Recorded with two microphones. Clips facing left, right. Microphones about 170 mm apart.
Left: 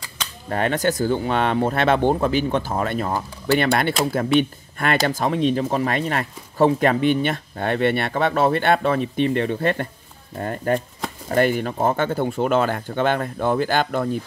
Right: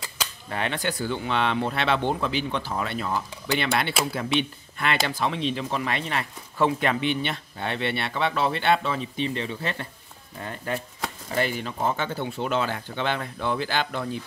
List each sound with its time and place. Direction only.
0.5 s speech: 45° left (ahead or behind)